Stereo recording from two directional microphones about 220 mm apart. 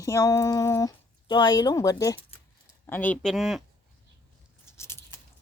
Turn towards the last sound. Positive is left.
turn(degrees=10)  # may be behind; listen again after turning